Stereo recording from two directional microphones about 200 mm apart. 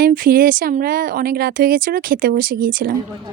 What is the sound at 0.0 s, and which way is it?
Speech, 45° right (ahead or behind).